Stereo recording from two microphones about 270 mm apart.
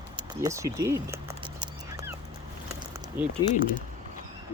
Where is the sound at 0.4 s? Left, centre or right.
Centre.